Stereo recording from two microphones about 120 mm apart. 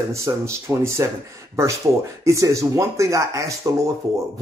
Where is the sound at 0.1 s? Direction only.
25° right (ahead or behind).